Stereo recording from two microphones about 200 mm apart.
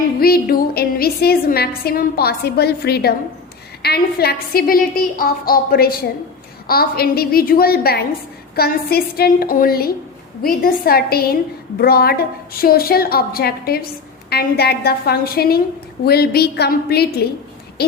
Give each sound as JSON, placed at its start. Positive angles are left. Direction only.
{"t": 0.2, "sound": "a woman's voice", "side_deg": 50}
{"t": 17.8, "sound": "hoot", "side_deg": 55}